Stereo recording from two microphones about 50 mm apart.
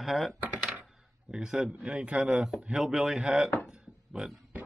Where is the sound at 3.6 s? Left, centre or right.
Centre.